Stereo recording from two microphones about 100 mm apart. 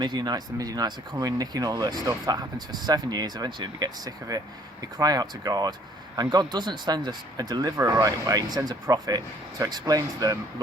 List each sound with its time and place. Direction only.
0.0 s speech: 45° right (ahead or behind)